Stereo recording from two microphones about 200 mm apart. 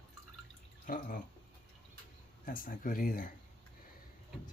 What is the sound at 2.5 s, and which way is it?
Speech, 45° left (ahead or behind).